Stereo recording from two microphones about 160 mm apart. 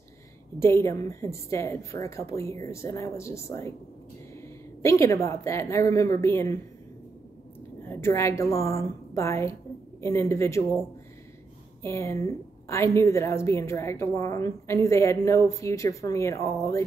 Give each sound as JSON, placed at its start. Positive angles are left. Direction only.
{"t": 0.6, "sound": "a woman's voice", "side_deg": 15}
{"t": 7.8, "sound": "a woman's voice", "side_deg": 15}
{"t": 11.8, "sound": "a woman's voice", "side_deg": 15}